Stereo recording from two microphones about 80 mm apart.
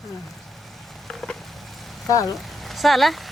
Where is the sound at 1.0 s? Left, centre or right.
Centre.